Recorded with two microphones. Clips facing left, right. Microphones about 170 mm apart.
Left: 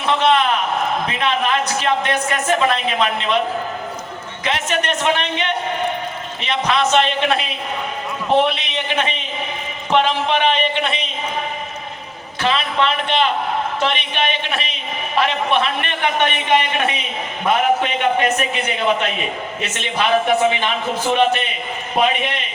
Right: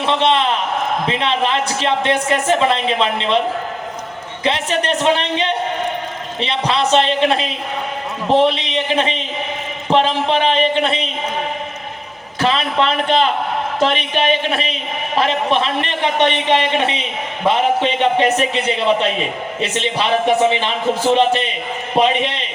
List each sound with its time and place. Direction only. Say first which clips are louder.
0.0 s a woman's voice: even; 25° right (ahead or behind)
4.4 s a man's voice: right 3 dB; 30° right (ahead or behind)
12.4 s a man's voice: right 2 dB; 35° right (ahead or behind)
22.0 s a woman's voice: even; 30° right (ahead or behind)